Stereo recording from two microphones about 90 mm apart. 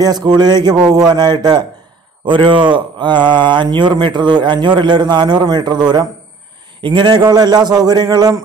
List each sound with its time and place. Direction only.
0.0 s a man's voice: 50° right (ahead or behind)
2.2 s a man's voice: 65° right (ahead or behind)